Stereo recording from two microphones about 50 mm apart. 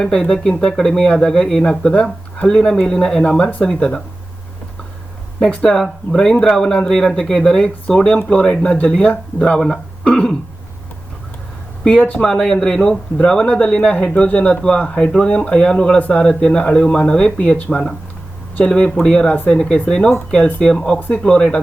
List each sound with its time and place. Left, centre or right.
0.0 s speech: centre
6.1 s speech: centre
10.0 s throat clearing: left
11.9 s a man's voice: left